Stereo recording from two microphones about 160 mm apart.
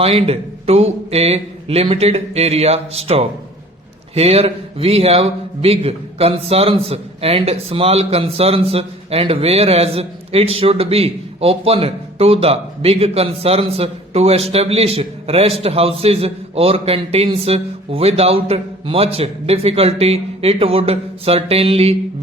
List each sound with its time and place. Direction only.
0.0 s a man's voice: 35° right (ahead or behind)